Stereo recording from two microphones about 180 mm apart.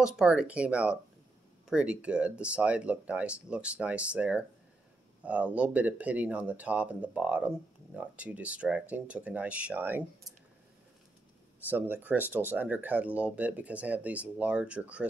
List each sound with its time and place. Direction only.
0.0 s speech: 5° right (ahead or behind)
11.6 s speech: 10° right (ahead or behind)